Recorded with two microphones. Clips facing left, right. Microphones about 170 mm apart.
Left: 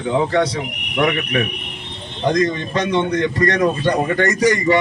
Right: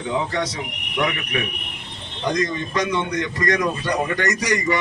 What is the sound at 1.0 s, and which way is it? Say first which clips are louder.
A man's voice: left 6 dB; 40° left (ahead or behind).